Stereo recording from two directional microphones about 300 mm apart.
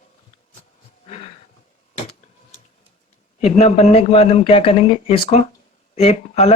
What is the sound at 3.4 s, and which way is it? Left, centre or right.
Speech, left.